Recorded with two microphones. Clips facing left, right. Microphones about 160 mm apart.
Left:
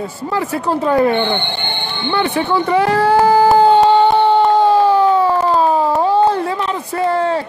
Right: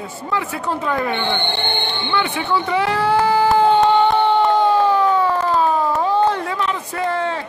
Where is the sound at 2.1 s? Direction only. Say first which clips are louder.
Left 5 dB; 40° left (ahead or behind).